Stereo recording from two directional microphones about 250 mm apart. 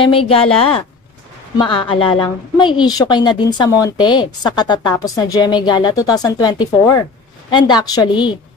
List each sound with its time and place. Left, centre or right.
0.0 s a woman's voice: left